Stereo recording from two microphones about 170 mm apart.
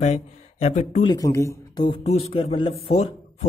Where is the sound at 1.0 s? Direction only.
20° left (ahead or behind).